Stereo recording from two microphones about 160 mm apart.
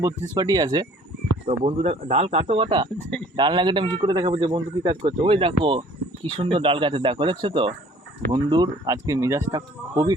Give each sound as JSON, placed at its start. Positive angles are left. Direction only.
{"t": 0.0, "sound": "speech", "side_deg": -25}
{"t": 1.5, "sound": "speech", "side_deg": -40}
{"t": 2.6, "sound": "speech", "side_deg": -30}